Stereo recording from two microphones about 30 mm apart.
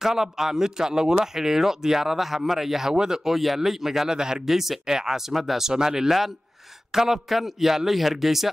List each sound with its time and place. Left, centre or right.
0.0 s a man's voice: centre
2.9 s speech: right
3.3 s a man's voice: centre; by 4.4 s right
4.5 s a man's voice: centre
5.7 s a man's voice: centre